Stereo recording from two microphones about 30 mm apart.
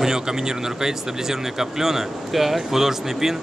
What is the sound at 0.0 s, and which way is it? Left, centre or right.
Speech, centre.